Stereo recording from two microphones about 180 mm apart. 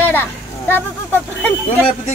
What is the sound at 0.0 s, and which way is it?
Speech, 10° left (ahead or behind).